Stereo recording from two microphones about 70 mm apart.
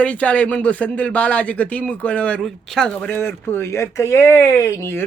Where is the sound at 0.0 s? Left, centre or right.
Centre.